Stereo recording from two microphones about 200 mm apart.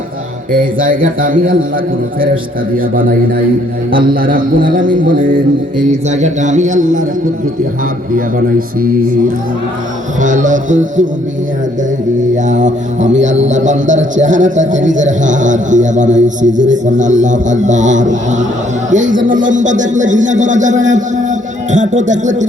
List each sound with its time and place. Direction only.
0.5 s a man's voice: 45° right (ahead or behind)
8.1 s a man's voice: 45° right (ahead or behind)
10.2 s a man's voice: 40° right (ahead or behind)
12.5 s a man's voice: 40° right (ahead or behind)